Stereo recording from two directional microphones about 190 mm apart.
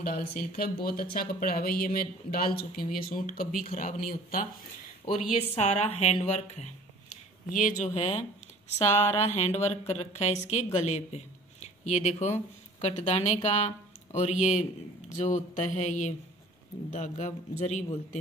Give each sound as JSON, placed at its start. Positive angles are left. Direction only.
{"t": 0.0, "sound": "speech", "side_deg": 50}
{"t": 5.5, "sound": "speech", "side_deg": 35}